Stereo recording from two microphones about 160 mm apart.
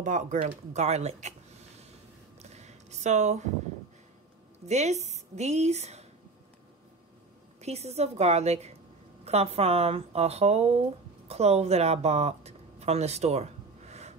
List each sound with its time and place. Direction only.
0.0 s a woman's voice: 50° right (ahead or behind)
2.3 s a sound: 45° right (ahead or behind)
4.6 s a woman's voice: 45° right (ahead or behind)
7.6 s a woman's voice: 40° right (ahead or behind)